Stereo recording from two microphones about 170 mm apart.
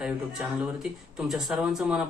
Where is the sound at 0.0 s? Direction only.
5° right (ahead or behind).